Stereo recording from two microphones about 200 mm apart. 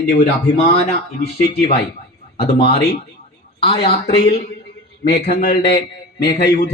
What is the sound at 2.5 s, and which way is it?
Speech, 30° left (ahead or behind).